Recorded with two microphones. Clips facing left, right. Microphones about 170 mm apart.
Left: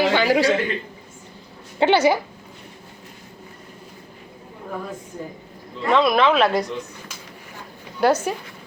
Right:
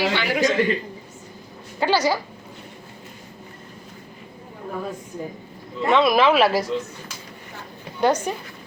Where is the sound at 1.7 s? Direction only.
25° left (ahead or behind).